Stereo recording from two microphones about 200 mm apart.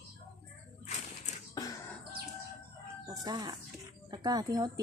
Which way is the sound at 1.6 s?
20° left (ahead or behind).